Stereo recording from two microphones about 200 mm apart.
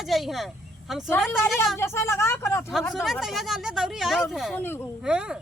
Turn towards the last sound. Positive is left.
turn(degrees=-5)  # may be behind; listen again after turning